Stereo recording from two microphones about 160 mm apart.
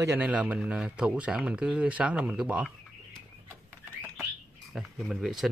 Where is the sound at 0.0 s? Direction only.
10° right (ahead or behind).